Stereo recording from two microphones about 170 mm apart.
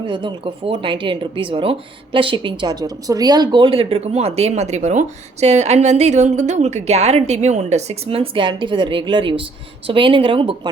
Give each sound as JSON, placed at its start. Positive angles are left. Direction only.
{"t": 0.0, "sound": "speech", "side_deg": -25}